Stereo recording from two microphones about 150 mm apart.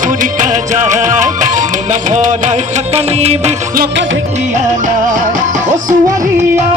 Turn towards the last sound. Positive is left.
turn(degrees=-55)  # may be behind; listen again after turning